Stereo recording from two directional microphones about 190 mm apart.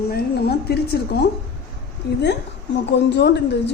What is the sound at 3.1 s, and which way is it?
Speech, 65° left (ahead or behind).